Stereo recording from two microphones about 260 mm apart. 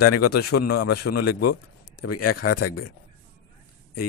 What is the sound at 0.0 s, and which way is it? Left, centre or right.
A man's voice, left.